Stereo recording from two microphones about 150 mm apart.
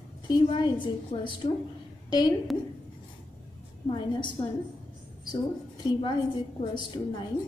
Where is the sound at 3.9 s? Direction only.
30° left (ahead or behind).